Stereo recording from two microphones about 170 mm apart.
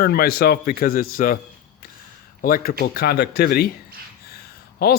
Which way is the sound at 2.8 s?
65° left (ahead or behind).